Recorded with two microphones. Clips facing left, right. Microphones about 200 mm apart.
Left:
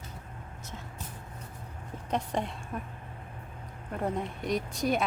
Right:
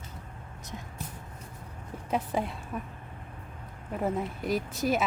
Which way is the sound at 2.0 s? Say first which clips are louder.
Right 2 dB; 5° right (ahead or behind).